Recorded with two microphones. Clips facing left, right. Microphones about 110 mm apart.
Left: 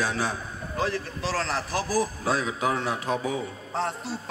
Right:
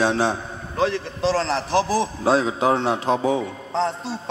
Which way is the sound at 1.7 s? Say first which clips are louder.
Right 6 dB; 80° right.